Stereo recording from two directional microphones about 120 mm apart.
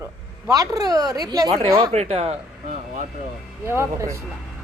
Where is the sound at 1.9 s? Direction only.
60° right (ahead or behind).